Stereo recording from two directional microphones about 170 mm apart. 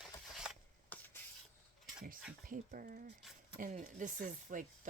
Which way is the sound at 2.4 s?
55° right (ahead or behind).